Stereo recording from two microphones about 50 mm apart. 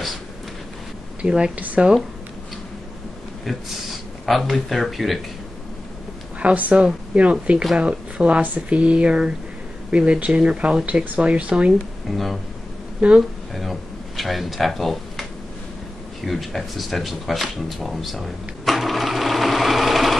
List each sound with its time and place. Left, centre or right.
1.2 s speech: centre
3.4 s speech: centre
6.4 s speech: right
12.1 s speech: centre
13.0 s speech: right
13.6 s speech: centre
16.3 s speech: centre